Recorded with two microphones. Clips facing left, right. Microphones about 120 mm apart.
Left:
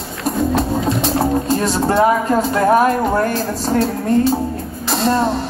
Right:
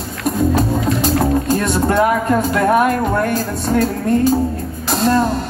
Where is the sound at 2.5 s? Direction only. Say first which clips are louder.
Left 2 dB; 35° left (ahead or behind).